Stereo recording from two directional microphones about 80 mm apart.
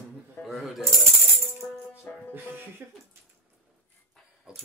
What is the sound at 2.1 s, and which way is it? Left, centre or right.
Music, centre.